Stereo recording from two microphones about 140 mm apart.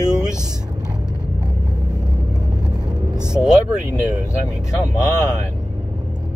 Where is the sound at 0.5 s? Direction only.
30° right (ahead or behind).